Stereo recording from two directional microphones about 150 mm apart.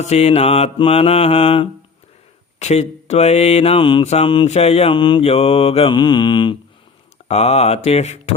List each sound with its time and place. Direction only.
0.0 s mantra: 45° left (ahead or behind)
2.6 s speech: 45° left (ahead or behind)
4.0 s mantra: 45° left (ahead or behind)
7.3 s speech: 45° left (ahead or behind)